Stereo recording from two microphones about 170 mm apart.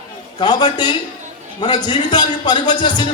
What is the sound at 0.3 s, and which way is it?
A man's voice, 25° left (ahead or behind).